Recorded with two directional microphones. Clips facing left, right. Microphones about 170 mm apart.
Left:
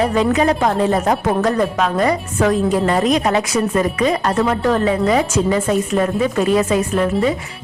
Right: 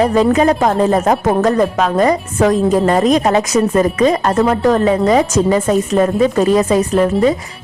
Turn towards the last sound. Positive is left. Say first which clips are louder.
# right 4 dB
turn(degrees=-40)  # may be behind; listen again after turning